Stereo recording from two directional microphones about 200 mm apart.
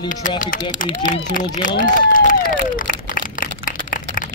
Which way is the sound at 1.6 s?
45° left (ahead or behind).